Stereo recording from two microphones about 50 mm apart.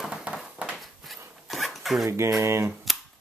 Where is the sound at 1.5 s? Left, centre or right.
Centre.